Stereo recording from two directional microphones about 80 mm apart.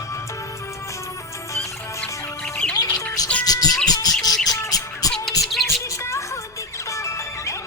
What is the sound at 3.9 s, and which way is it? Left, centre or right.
Bird, left.